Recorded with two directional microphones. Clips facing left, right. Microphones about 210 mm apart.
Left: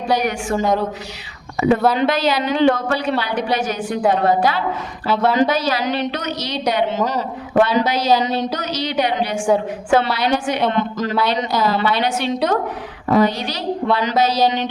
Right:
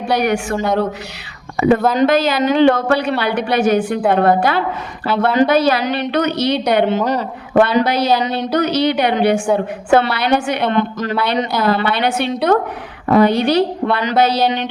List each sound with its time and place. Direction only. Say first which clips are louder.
0.1 s speech: right 3 dB; 65° right (ahead or behind)
1.6 s speech: right 3 dB; 60° right (ahead or behind)